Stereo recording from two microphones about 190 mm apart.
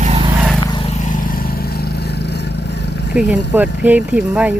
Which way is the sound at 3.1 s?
5° right (ahead or behind).